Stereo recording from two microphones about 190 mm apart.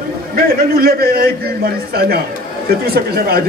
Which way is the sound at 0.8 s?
55° right (ahead or behind).